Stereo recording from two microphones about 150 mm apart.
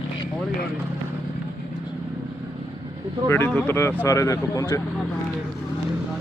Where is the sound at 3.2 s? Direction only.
15° left (ahead or behind).